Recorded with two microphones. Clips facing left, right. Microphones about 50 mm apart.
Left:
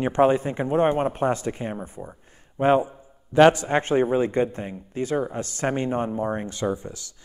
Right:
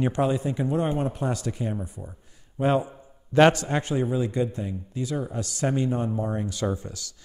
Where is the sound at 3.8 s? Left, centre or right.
Left.